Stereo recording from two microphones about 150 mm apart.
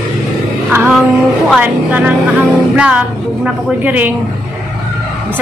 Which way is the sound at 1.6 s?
10° right (ahead or behind).